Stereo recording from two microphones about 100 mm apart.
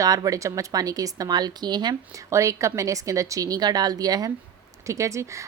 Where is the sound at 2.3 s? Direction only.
30° right (ahead or behind).